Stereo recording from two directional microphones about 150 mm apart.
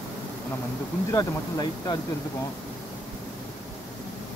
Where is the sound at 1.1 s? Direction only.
25° left (ahead or behind).